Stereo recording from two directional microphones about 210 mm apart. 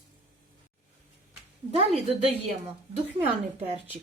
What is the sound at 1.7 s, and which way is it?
Speech, 30° right (ahead or behind).